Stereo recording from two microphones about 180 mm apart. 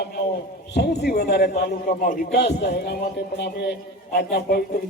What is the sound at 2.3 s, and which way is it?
A man's voice, 70° left (ahead or behind).